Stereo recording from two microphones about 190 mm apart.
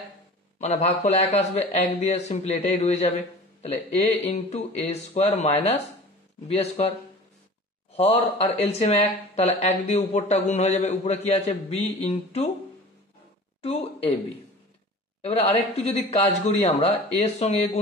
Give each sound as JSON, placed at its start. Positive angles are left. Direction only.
{"t": 0.6, "sound": "speech", "side_deg": 35}
{"t": 7.9, "sound": "speech", "side_deg": 35}
{"t": 13.6, "sound": "speech", "side_deg": 30}
{"t": 15.2, "sound": "speech", "side_deg": 35}